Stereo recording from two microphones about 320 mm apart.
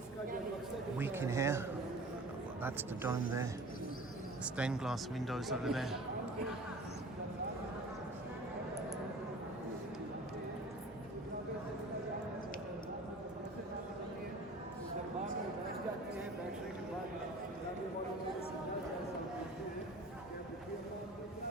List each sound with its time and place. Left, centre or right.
0.9 s speech: centre
4.5 s a man's voice: centre